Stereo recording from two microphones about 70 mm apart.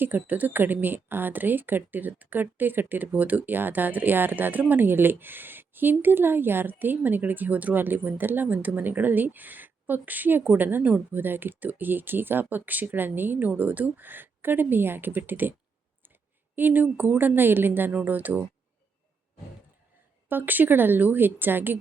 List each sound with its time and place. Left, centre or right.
0.0 s speech: right
16.6 s speech: right
20.2 s speech: right